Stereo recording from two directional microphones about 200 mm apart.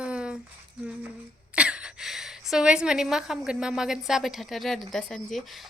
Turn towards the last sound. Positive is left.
turn(degrees=0)  # may be behind; listen again after turning